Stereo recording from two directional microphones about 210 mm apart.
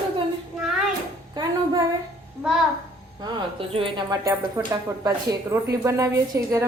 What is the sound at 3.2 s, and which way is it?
A woman's voice, 25° right (ahead or behind).